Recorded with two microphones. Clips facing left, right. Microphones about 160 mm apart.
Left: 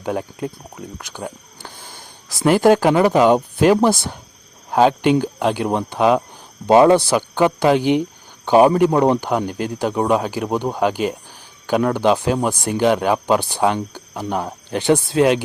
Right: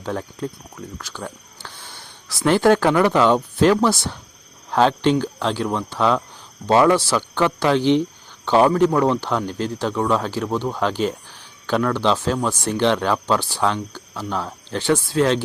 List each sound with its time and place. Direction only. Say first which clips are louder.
0.0 s speech: left 3 dB; 15° left (ahead or behind)